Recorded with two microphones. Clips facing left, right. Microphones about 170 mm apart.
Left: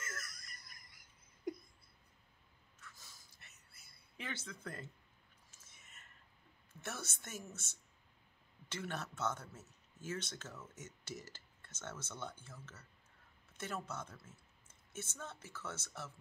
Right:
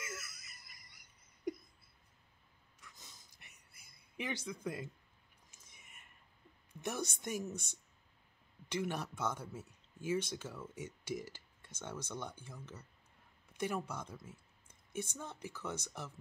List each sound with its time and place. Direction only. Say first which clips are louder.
0.0 s laughter: right 2 dB; 10° right (ahead or behind)
2.8 s a sound: right 1 dB; 20° right (ahead or behind)
6.7 s speech: right 7 dB; 15° right (ahead or behind)